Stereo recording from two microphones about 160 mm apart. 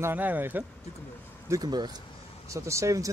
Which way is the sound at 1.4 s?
20° right (ahead or behind).